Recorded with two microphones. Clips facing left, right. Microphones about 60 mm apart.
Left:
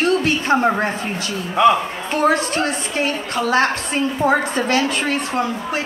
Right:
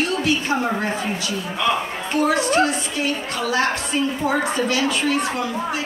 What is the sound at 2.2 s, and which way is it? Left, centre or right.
A woman's voice, left.